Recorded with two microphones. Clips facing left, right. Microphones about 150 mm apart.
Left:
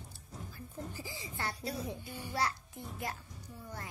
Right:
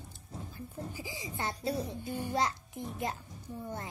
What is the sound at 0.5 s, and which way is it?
Sheep, 15° right (ahead or behind).